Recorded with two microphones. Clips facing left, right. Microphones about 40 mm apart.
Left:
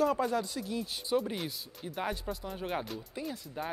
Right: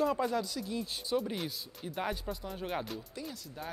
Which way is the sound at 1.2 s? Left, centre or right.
Centre.